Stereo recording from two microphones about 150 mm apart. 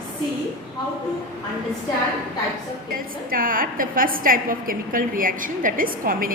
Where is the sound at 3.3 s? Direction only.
70° right (ahead or behind).